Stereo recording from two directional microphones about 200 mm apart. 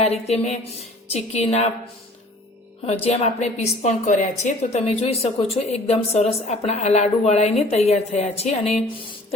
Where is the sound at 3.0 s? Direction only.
30° left (ahead or behind).